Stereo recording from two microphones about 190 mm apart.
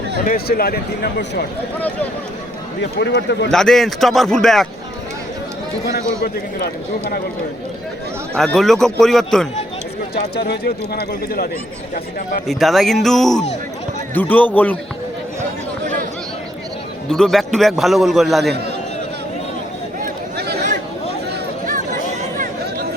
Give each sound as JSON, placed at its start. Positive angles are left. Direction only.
{"t": 0.3, "sound": "speech", "side_deg": 50}
{"t": 3.0, "sound": "speech", "side_deg": 65}
{"t": 3.5, "sound": "a man's voice", "side_deg": 5}
{"t": 8.4, "sound": "a man's voice", "side_deg": 0}
{"t": 10.2, "sound": "speech", "side_deg": 60}
{"t": 12.5, "sound": "a man's voice", "side_deg": 0}
{"t": 17.1, "sound": "a man's voice", "side_deg": 0}
{"t": 20.0, "sound": "a sound", "side_deg": -60}